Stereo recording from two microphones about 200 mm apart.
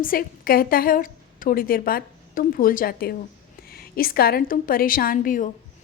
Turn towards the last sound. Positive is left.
turn(degrees=45)  # may be behind; listen again after turning